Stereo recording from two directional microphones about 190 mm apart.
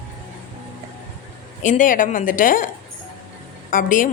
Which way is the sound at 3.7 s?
45° left (ahead or behind).